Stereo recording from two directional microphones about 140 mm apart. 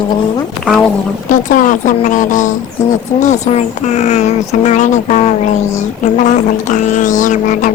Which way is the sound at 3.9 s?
55° left (ahead or behind).